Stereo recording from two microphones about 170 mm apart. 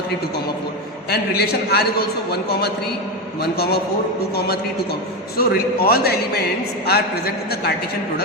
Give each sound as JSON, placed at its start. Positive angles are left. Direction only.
{"t": 1.1, "sound": "a man's voice", "side_deg": 65}
{"t": 4.4, "sound": "a man's voice", "side_deg": 65}